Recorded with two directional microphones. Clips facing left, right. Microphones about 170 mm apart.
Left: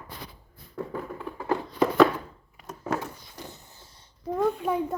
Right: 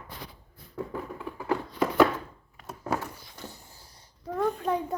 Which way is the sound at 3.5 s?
25° left (ahead or behind).